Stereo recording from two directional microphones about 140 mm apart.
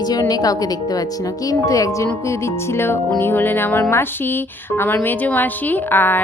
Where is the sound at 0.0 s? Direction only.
25° left (ahead or behind).